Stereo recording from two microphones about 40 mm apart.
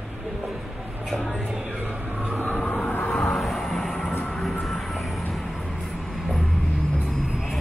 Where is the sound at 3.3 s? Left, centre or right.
Centre.